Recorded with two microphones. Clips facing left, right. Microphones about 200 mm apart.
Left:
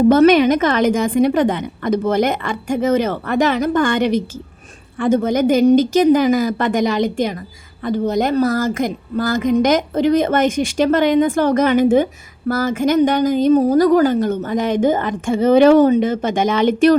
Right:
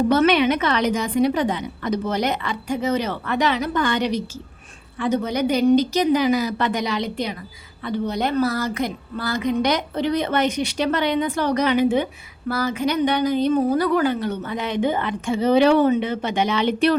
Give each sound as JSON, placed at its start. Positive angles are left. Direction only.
{"t": 0.1, "sound": "a woman's voice", "side_deg": 45}